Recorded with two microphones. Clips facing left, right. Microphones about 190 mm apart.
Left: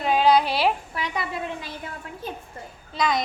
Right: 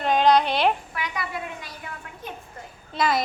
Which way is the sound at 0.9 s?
30° left (ahead or behind).